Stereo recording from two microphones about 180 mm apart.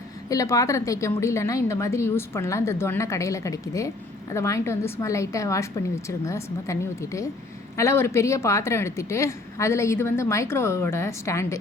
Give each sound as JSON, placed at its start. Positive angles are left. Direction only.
{"t": 0.3, "sound": "a woman's voice", "side_deg": 20}